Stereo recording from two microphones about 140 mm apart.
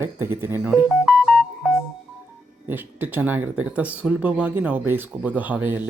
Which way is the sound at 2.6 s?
15° right (ahead or behind).